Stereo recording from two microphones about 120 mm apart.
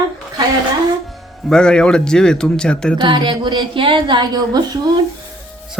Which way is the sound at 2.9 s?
40° right (ahead or behind).